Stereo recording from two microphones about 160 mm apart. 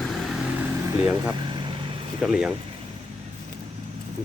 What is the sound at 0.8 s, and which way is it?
Speech, 20° right (ahead or behind).